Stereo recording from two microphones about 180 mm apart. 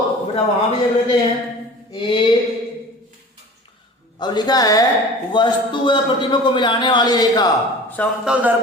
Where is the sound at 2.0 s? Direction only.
25° left (ahead or behind).